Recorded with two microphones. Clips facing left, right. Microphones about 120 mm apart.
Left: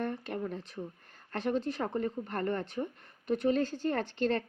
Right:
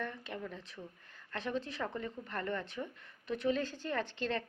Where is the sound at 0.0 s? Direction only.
45° left (ahead or behind).